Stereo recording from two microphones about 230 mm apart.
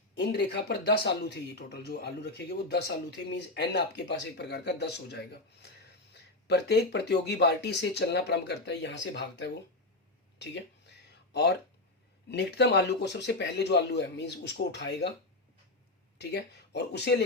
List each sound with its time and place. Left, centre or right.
0.1 s speech: left
6.5 s speech: left
10.3 s a sound: left
12.3 s speech: left
16.1 s speech: left